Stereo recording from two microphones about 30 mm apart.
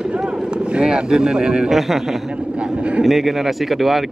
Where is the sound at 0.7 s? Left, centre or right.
Right.